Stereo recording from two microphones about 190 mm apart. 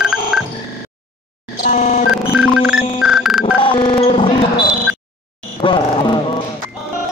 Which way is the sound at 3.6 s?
25° left (ahead or behind).